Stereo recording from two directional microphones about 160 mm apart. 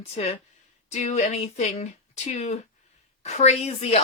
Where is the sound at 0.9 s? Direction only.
45° left (ahead or behind).